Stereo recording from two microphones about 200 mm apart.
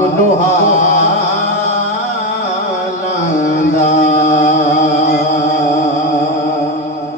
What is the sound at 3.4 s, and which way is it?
Chant, 40° left (ahead or behind).